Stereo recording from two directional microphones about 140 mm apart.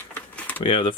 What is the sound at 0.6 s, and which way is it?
Speech, 40° left (ahead or behind).